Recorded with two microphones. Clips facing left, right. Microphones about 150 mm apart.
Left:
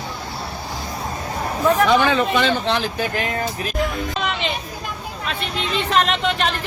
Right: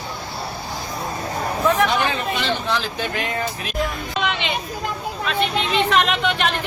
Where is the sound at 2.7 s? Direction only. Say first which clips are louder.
Left 2 dB; 50° left (ahead or behind).